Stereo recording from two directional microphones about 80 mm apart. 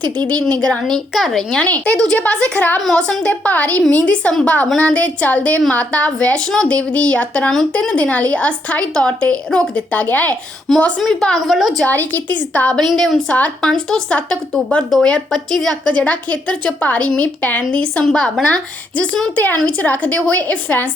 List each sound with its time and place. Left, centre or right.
0.7 s a woman's voice: centre
11.0 s a woman's voice: centre
11.9 s a woman's voice: left
12.9 s a woman's voice: centre
14.8 s a woman's voice: centre
15.9 s a woman's voice: centre
18.0 s a woman's voice: centre
19.4 s a woman's voice: left